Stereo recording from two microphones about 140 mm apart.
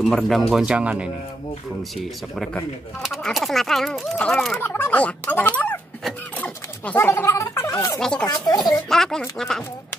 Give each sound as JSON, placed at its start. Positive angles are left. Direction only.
{"t": 0.0, "sound": "speech", "side_deg": 0}
{"t": 3.0, "sound": "speech", "side_deg": 0}
{"t": 4.6, "sound": "fowl", "side_deg": 15}
{"t": 6.0, "sound": "speech", "side_deg": 10}
{"t": 8.0, "sound": "speech", "side_deg": 5}
{"t": 8.3, "sound": "speech", "side_deg": 25}
{"t": 8.8, "sound": "speech", "side_deg": 5}